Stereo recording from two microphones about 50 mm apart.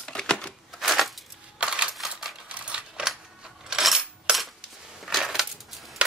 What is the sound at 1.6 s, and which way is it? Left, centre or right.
Typing, centre.